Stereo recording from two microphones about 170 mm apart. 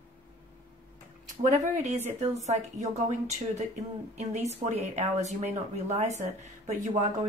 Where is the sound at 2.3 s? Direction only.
40° right (ahead or behind).